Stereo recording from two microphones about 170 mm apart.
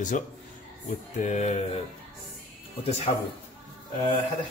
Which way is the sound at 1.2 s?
40° left (ahead or behind).